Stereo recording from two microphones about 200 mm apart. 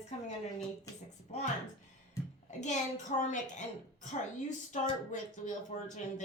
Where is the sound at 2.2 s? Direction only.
15° left (ahead or behind).